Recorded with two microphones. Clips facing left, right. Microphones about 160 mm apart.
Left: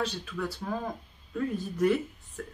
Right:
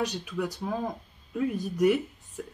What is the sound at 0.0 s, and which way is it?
Speech, 15° right (ahead or behind).